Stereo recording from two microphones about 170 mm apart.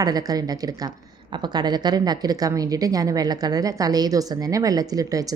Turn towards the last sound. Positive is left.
turn(degrees=-20)  # may be behind; listen again after turning